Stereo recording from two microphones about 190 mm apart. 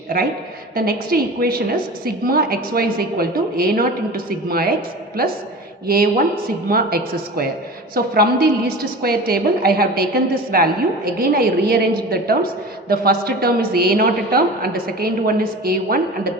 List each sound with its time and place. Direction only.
0.8 s a woman's voice: 50° right (ahead or behind)